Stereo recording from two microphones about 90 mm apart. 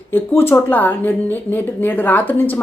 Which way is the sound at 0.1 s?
25° left (ahead or behind).